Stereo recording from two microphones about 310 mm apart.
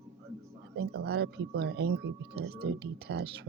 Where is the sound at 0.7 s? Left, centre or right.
Right.